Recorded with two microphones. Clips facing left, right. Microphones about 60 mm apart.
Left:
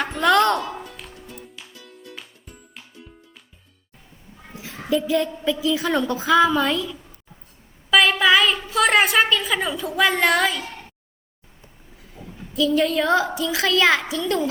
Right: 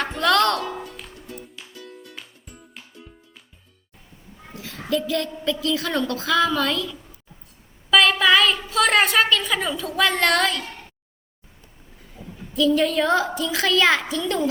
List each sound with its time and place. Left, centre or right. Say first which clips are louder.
0.2 s music: left 2 dB; centre
0.6 s music: right 1 dB; centre
4.5 s a woman's voice: left 2 dB; centre
7.9 s a woman's voice: even; centre
11.9 s a woman's voice: even; centre